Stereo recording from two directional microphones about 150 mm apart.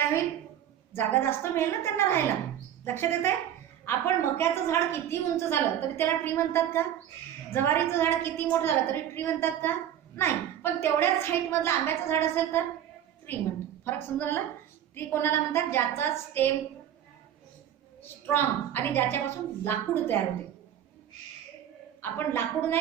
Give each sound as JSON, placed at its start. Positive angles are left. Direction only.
{"t": 0.9, "sound": "a woman's voice", "side_deg": 15}
{"t": 13.8, "sound": "a woman's voice", "side_deg": 15}
{"t": 18.0, "sound": "a woman's voice", "side_deg": 15}
{"t": 22.0, "sound": "a woman's voice", "side_deg": 15}